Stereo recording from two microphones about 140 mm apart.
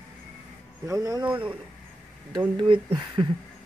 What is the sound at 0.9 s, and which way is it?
Speech, 25° right (ahead or behind).